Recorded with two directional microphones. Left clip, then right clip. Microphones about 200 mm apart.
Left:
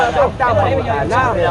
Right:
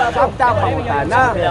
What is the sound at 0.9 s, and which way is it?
Speech, 50° right (ahead or behind).